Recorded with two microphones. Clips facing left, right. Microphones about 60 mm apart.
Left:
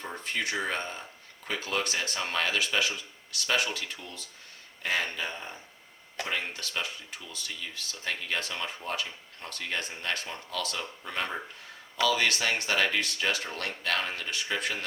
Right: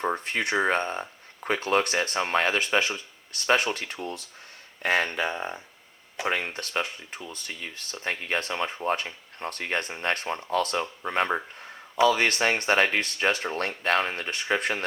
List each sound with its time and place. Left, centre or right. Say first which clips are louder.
0.0 s speech: right 6 dB; right
6.2 s speech: right 6 dB; right